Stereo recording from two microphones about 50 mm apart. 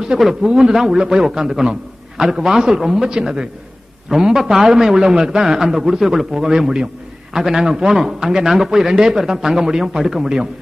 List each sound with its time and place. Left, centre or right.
0.2 s a man's voice: centre